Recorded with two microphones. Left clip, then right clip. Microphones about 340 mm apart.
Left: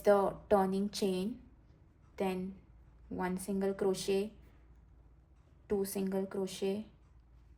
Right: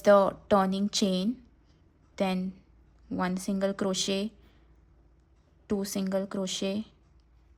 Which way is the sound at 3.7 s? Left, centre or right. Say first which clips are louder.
Right 4 dB; right.